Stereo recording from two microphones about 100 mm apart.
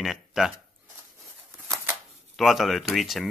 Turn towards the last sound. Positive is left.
turn(degrees=0)  # may be behind; listen again after turning